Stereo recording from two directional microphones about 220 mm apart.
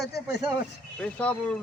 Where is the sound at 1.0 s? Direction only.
5° left (ahead or behind).